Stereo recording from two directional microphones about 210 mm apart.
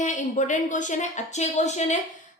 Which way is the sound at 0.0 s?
35° left (ahead or behind).